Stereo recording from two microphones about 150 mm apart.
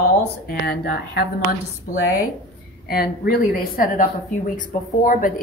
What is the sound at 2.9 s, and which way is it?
Speech, 85° left.